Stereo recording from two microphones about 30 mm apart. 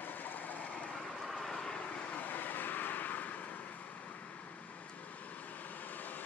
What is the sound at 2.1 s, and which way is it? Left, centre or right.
Vehicle, left.